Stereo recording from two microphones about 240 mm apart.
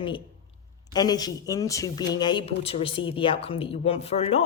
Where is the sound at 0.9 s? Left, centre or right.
Centre.